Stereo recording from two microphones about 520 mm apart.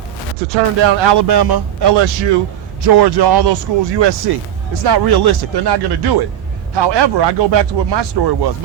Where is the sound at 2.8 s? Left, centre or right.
Right.